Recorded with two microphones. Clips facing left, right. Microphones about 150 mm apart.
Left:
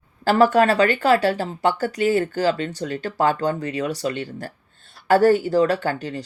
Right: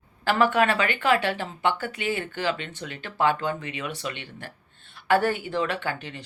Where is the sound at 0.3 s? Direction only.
40° left (ahead or behind).